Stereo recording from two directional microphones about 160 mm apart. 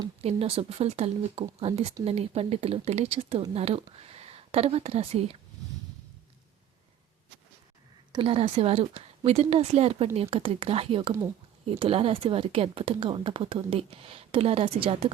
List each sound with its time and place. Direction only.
0.2 s speech: 40° right (ahead or behind)
8.1 s speech: 35° right (ahead or behind)